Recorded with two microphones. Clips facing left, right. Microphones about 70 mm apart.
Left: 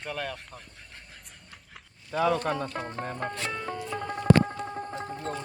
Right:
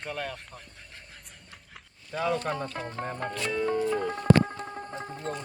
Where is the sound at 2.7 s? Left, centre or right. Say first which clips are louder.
Left 1 dB; centre.